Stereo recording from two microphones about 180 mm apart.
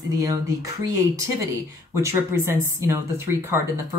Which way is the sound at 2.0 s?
15° right (ahead or behind).